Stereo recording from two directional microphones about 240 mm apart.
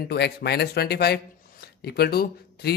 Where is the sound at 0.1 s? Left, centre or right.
Left.